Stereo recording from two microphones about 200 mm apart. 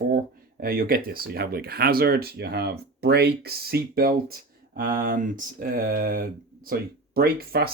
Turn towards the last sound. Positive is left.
turn(degrees=-50)  # may be behind; listen again after turning